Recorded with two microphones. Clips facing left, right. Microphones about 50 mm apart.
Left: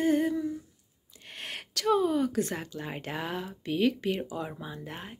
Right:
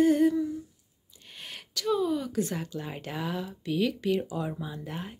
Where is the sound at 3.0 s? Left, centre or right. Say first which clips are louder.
Right 1 dB; left.